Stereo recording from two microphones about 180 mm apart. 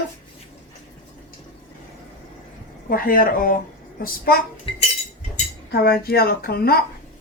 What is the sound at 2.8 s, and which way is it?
A woman's voice, 55° left (ahead or behind).